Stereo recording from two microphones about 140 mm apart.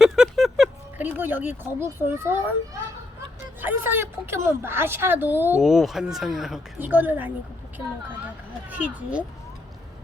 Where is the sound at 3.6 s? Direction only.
15° right (ahead or behind).